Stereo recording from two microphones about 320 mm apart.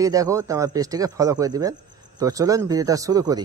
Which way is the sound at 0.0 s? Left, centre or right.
Centre.